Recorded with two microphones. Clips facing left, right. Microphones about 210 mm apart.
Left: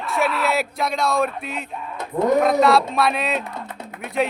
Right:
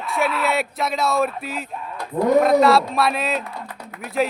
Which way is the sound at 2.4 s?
Centre (ahead or behind).